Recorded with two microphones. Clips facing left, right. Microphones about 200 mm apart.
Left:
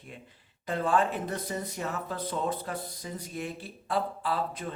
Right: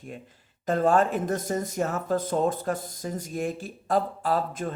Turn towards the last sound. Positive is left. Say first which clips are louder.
# right 5 dB
turn(degrees=-45)  # may be behind; listen again after turning